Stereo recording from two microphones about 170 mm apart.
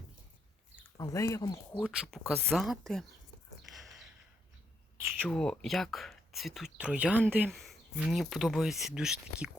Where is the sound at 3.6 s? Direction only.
Centre (ahead or behind).